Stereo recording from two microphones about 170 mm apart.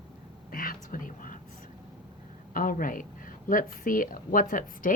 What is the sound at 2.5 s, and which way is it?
Speech, 55° left (ahead or behind).